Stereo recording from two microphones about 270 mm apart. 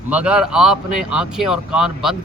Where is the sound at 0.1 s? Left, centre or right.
Centre.